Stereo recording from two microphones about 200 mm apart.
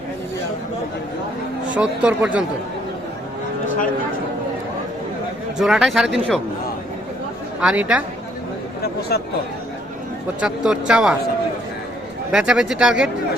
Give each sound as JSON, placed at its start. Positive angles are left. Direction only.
{"t": 1.7, "sound": "speech", "side_deg": -5}
{"t": 5.5, "sound": "speech", "side_deg": 0}
{"t": 7.6, "sound": "speech", "side_deg": -5}
{"t": 8.8, "sound": "a sound", "side_deg": 50}
{"t": 10.4, "sound": "speech", "side_deg": -5}
{"t": 12.3, "sound": "speech", "side_deg": -5}